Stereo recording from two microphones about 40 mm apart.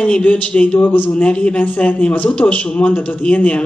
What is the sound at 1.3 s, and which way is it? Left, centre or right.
Speech, left.